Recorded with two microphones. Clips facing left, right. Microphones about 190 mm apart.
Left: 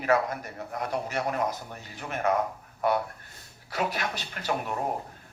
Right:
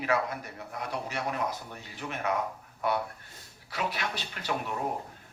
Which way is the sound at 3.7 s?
45° left (ahead or behind).